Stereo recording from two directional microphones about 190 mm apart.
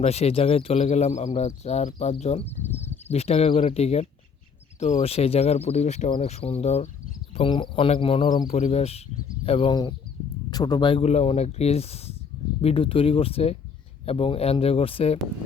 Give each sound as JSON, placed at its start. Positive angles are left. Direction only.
{"t": 0.0, "sound": "a man's voice", "side_deg": 35}
{"t": 8.5, "sound": "a man's voice", "side_deg": 35}